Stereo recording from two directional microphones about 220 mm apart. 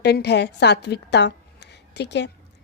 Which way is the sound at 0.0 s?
50° left (ahead or behind).